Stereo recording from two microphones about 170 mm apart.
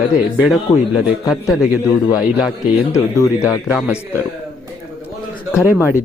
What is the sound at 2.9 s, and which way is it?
Speech, 20° left (ahead or behind).